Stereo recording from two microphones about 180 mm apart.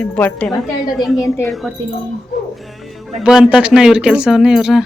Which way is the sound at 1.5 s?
Centre (ahead or behind).